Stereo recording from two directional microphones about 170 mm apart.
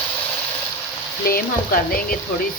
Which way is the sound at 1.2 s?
60° left (ahead or behind).